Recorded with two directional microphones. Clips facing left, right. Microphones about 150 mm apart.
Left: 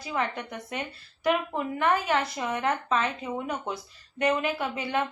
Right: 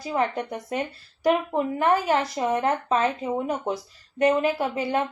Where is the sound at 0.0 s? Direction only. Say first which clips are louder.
Right 5 dB; 40° right (ahead or behind).